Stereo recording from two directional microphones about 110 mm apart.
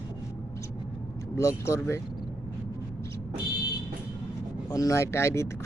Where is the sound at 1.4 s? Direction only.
30° left (ahead or behind).